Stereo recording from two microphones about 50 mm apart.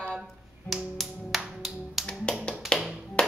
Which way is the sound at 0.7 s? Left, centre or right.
Centre.